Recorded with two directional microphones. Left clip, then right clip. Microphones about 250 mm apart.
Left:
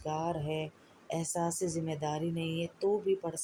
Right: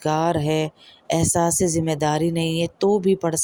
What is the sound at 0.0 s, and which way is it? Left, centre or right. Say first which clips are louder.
Speech: right 14 dB; right.